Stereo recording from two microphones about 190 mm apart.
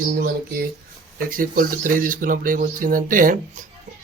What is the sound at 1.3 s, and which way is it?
Speech, 45° right (ahead or behind).